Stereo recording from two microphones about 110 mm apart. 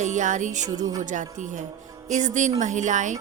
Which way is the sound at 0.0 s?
90° right.